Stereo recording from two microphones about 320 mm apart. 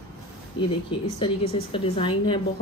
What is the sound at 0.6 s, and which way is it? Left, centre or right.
A woman's voice, centre.